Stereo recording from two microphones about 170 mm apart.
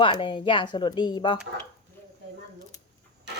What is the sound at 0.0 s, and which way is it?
Speech, 30° left (ahead or behind).